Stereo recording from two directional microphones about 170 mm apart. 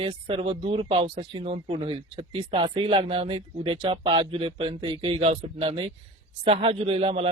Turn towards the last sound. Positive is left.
turn(degrees=-35)  # may be behind; listen again after turning